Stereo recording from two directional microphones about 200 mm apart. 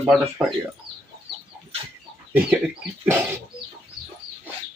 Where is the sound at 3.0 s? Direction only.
10° right (ahead or behind).